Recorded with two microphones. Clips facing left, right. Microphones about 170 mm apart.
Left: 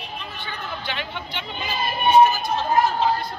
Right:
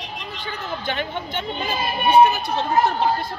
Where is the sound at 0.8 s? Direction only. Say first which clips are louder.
Right 5 dB; 45° right (ahead or behind); by 3.1 s 65° right (ahead or behind).